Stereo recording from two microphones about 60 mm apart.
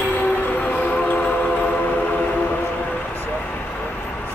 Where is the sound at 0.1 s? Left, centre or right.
Left.